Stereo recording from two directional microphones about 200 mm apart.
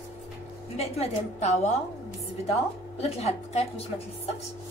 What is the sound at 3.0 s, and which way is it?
A woman's voice, 30° left (ahead or behind).